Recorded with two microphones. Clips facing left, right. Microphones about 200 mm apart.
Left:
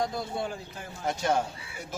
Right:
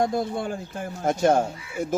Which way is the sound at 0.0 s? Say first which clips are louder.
Right 6 dB; 50° right (ahead or behind).